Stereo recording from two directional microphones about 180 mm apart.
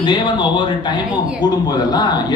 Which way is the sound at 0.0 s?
25° left (ahead or behind).